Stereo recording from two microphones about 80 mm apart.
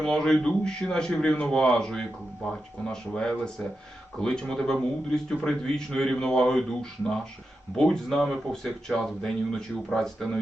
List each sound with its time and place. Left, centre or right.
0.0 s a man's voice: centre